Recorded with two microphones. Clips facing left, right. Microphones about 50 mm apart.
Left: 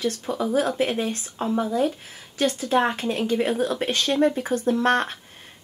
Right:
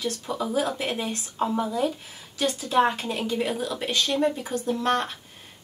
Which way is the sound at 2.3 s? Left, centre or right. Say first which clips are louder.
Left 1 dB; left.